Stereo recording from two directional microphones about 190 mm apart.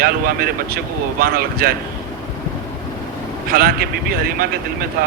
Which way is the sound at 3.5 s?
50° right (ahead or behind).